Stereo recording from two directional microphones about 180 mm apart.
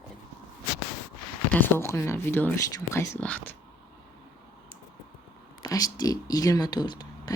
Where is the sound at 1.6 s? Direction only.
15° left (ahead or behind).